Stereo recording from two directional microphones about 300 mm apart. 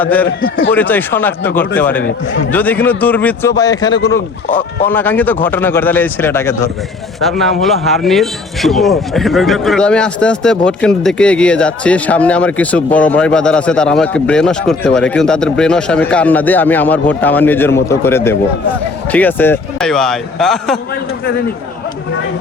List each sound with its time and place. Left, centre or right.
0.0 s speech: centre
0.3 s a man's voice: left
0.7 s a man's voice: centre
4.4 s speech: left
4.9 s a man's voice: centre